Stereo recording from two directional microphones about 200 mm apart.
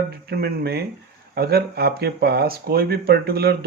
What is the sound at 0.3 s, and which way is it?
Speech, 50° right (ahead or behind).